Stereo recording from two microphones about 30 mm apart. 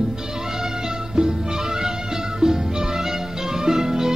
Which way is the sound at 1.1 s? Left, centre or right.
Right.